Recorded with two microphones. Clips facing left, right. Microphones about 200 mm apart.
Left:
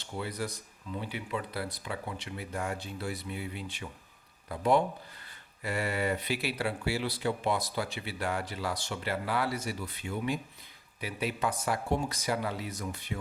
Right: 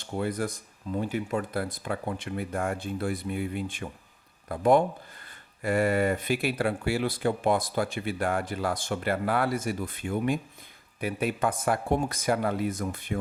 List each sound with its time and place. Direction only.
0.0 s speech: 50° right (ahead or behind)